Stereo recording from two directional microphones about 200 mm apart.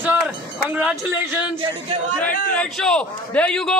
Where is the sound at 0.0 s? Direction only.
10° right (ahead or behind).